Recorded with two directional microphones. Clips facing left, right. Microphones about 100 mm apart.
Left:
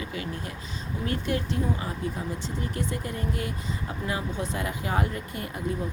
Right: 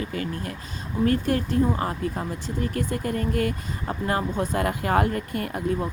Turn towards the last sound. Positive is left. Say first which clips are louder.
# right 5 dB
turn(degrees=-55)  # may be behind; listen again after turning